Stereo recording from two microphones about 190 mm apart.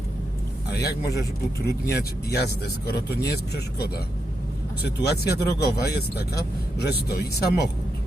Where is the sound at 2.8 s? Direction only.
60° left (ahead or behind).